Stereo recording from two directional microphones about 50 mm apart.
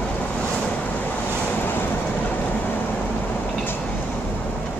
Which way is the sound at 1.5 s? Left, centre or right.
Left.